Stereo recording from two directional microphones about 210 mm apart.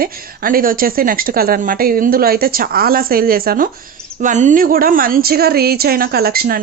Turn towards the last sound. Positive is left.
turn(degrees=-45)  # may be behind; listen again after turning